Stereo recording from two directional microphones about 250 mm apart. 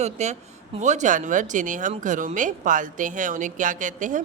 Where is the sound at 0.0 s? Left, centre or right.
Right.